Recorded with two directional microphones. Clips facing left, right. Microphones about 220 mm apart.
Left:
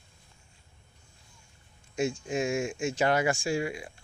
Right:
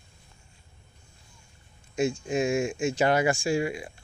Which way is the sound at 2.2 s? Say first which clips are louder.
Right 3 dB; 20° right (ahead or behind).